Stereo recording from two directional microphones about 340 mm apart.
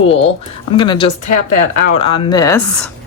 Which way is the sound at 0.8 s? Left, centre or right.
Centre.